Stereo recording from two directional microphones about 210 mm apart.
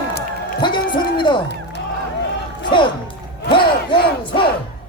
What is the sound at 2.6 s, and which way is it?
Music, 20° left (ahead or behind).